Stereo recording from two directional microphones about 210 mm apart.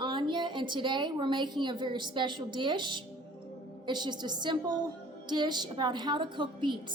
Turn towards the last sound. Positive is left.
turn(degrees=-20)  # may be behind; listen again after turning